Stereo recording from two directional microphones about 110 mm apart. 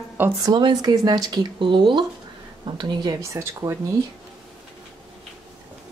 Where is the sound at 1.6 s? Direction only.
50° right (ahead or behind).